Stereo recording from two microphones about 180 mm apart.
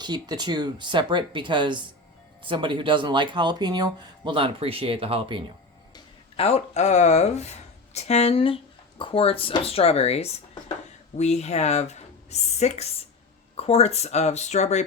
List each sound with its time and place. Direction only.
0.0 s speech: 25° right (ahead or behind)
5.9 s speech: 35° left (ahead or behind)